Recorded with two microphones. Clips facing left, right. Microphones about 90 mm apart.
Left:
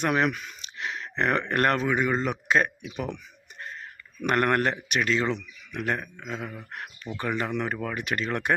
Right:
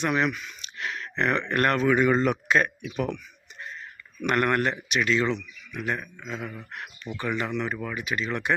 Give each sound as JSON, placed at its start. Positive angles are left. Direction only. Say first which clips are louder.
{"t": 0.0, "sound": "speech", "louder": "left 1 dB", "side_deg": 50}
{"t": 0.6, "sound": "speech", "louder": "right 1 dB", "side_deg": 25}
{"t": 2.0, "sound": "speech", "louder": "right 4 dB", "side_deg": 5}
{"t": 2.5, "sound": "speech", "louder": "even", "side_deg": 30}
{"t": 4.2, "sound": "speech", "louder": "even", "side_deg": 40}
{"t": 5.7, "sound": "speech", "louder": "left 1 dB", "side_deg": 55}